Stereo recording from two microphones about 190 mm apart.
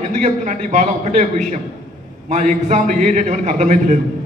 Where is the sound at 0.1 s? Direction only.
40° right (ahead or behind).